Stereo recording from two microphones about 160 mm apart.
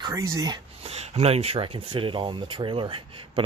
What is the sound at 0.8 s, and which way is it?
Speech, 40° right (ahead or behind).